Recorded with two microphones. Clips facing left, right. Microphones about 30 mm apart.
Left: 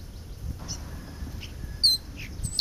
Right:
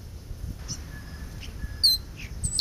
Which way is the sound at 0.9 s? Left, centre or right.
Centre.